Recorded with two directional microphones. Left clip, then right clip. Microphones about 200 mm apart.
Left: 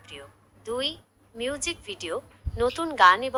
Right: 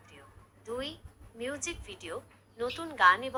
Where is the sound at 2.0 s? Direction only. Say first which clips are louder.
Left 9 dB; 45° left (ahead or behind).